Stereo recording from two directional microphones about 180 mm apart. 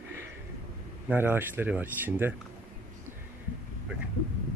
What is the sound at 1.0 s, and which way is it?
Speech, 10° right (ahead or behind).